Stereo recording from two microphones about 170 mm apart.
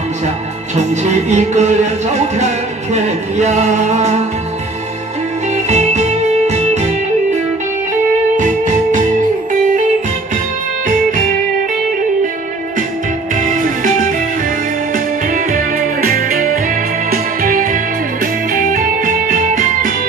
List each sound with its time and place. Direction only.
0.7 s music: 40° right (ahead or behind)
5.7 s music: 40° right (ahead or behind)
8.4 s music: 45° right (ahead or behind)
10.9 s music: 50° right (ahead or behind)
13.4 s music: 50° right (ahead or behind)
15.3 s music: 55° right (ahead or behind)